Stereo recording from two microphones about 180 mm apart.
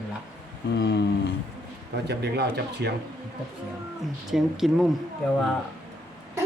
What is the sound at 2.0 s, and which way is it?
Speech, 65° right (ahead or behind).